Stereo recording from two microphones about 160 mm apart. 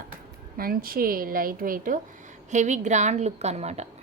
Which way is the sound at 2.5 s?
50° right (ahead or behind).